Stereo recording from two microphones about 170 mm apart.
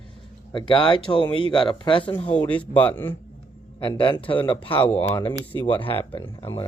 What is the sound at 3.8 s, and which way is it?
Speech, 30° left (ahead or behind).